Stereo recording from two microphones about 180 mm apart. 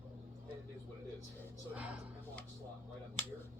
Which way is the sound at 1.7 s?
5° right (ahead or behind).